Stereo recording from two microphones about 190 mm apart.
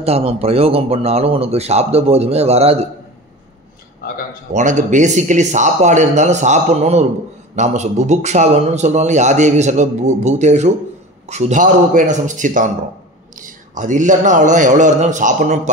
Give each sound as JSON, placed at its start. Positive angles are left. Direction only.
{"t": 0.0, "sound": "a man's voice", "side_deg": -30}
{"t": 4.5, "sound": "a man's voice", "side_deg": -40}